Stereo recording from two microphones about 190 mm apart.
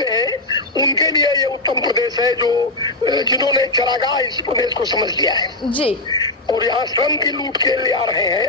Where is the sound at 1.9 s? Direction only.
20° right (ahead or behind).